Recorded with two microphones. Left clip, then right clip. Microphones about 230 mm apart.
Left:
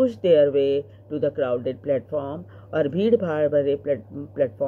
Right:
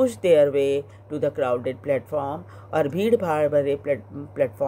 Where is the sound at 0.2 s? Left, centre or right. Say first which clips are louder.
Even; right.